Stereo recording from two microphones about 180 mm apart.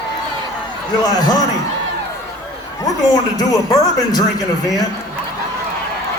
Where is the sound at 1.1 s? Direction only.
20° left (ahead or behind).